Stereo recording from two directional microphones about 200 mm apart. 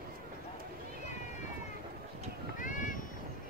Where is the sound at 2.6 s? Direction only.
40° left (ahead or behind).